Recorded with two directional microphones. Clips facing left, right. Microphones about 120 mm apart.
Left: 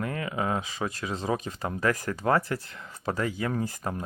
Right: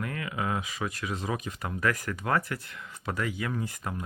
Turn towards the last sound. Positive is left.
turn(degrees=30)  # may be behind; listen again after turning